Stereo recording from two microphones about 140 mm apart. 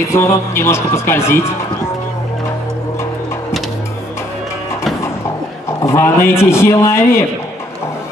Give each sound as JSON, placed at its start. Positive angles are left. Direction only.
{"t": 0.1, "sound": "a man's voice", "side_deg": 20}
{"t": 5.8, "sound": "a man's voice", "side_deg": 20}